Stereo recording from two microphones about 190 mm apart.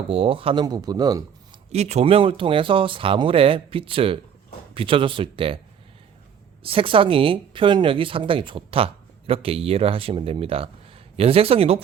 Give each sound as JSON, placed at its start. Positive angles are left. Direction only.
{"t": 0.1, "sound": "speech", "side_deg": -30}
{"t": 1.7, "sound": "speech", "side_deg": -35}
{"t": 6.6, "sound": "speech", "side_deg": -30}